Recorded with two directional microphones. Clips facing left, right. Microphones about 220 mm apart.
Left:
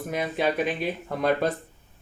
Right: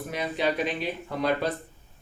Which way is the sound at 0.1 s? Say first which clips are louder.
Left 2 dB; 50° left (ahead or behind).